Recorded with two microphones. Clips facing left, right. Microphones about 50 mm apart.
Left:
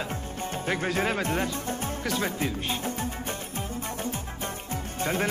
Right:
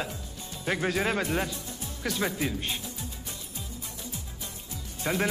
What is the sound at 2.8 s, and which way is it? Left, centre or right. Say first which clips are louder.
Music: left 9 dB; left.